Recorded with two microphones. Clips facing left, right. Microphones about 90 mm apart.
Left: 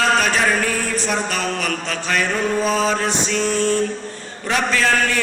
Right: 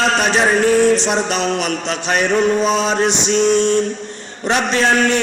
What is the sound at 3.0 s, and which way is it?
Male singing, 80° right.